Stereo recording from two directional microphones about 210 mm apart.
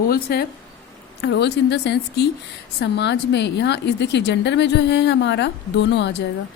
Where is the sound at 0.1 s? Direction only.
50° left (ahead or behind).